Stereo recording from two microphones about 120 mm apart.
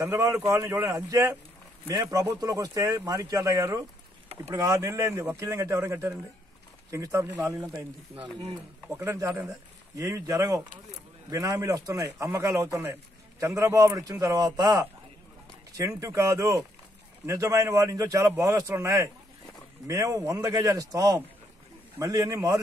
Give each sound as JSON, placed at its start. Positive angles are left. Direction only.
{"t": 0.0, "sound": "speech", "side_deg": -25}
{"t": 8.9, "sound": "speech", "side_deg": -25}